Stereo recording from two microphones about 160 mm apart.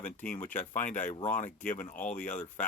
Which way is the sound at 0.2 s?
10° left (ahead or behind).